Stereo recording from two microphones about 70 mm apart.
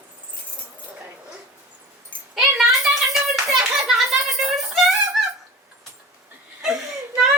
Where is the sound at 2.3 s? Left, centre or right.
Centre.